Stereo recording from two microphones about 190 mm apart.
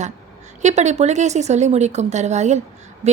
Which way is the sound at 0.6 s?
35° right (ahead or behind).